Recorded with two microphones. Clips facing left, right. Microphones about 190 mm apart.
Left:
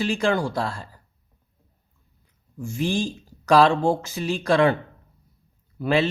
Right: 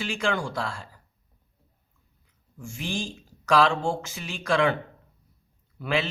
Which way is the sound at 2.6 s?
35° left (ahead or behind).